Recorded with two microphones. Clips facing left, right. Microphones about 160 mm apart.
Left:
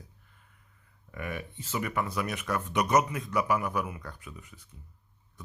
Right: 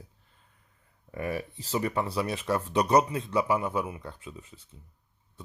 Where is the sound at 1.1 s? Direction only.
30° right (ahead or behind).